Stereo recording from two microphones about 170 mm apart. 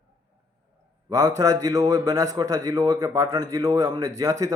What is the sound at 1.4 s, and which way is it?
Speech, 20° right (ahead or behind).